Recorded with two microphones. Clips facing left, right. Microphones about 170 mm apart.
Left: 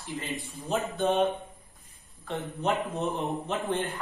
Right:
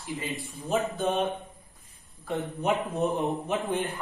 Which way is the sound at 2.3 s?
15° right (ahead or behind).